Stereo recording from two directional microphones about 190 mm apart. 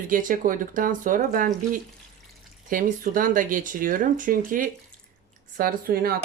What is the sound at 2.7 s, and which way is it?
Speech, 45° right (ahead or behind).